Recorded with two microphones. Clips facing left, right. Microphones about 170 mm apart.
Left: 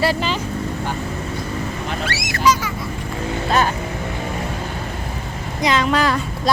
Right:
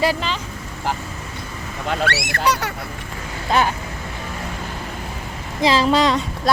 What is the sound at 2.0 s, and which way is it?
Speech, 60° right (ahead or behind).